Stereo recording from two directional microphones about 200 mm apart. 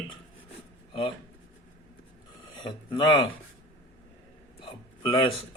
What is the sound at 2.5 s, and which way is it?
Speech, 25° left (ahead or behind).